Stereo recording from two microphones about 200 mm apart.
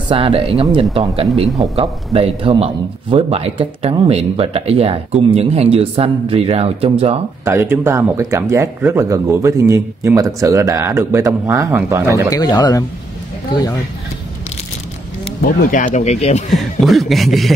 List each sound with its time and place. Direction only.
0.1 s a man's voice: 30° right (ahead or behind)
7.4 s speech: 10° right (ahead or behind)
12.3 s speech: 20° left (ahead or behind)
15.4 s speech: 45° left (ahead or behind)
16.8 s speech: centre (ahead or behind)